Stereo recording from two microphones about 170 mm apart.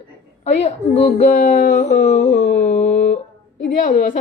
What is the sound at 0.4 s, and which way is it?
Speech, 40° left (ahead or behind).